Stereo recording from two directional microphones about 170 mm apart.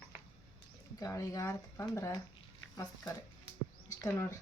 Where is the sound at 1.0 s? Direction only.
20° left (ahead or behind).